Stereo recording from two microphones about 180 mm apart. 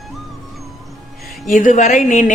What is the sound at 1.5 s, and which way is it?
Speech, 45° left (ahead or behind).